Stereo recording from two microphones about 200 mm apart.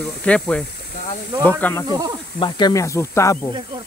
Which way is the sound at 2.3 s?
25° left (ahead or behind).